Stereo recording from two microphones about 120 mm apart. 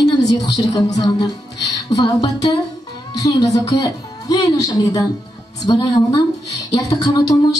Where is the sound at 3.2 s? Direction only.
30° left (ahead or behind).